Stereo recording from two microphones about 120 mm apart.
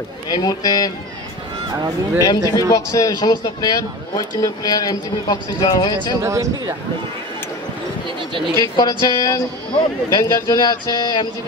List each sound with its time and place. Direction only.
0.3 s a man's voice: 30° left (ahead or behind)
2.2 s a man's voice: 30° left (ahead or behind)
6.2 s speech: 25° right (ahead or behind)
8.5 s a man's voice: 30° left (ahead or behind)